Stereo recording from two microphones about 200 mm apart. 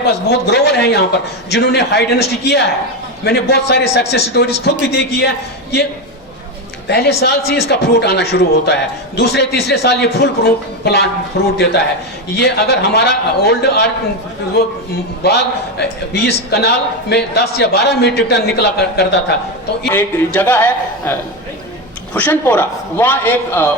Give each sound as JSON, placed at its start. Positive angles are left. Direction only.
{"t": 0.0, "sound": "a man's voice", "side_deg": 55}
{"t": 6.8, "sound": "a man's voice", "side_deg": 55}
{"t": 15.8, "sound": "a man's voice", "side_deg": 55}
{"t": 19.9, "sound": "a man's voice", "side_deg": 10}